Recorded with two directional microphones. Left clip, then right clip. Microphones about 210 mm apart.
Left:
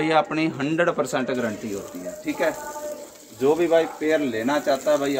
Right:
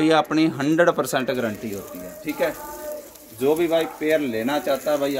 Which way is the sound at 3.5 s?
50° right (ahead or behind).